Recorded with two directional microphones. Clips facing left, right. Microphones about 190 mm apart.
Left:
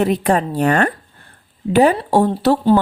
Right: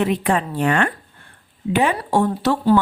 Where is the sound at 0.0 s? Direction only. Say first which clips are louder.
Left 3 dB; 40° left (ahead or behind).